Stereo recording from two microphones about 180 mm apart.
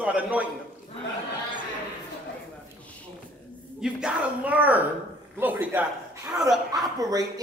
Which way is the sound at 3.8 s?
5° right (ahead or behind).